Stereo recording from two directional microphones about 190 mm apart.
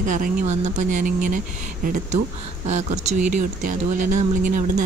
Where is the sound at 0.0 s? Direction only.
40° right (ahead or behind).